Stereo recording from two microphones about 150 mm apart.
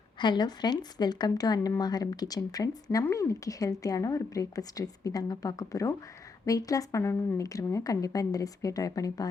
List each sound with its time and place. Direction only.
0.2 s speech: 30° left (ahead or behind)